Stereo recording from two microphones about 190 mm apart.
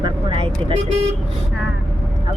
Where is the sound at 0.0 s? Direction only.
25° right (ahead or behind).